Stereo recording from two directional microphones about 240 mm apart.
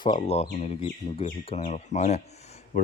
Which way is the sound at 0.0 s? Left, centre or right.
Centre.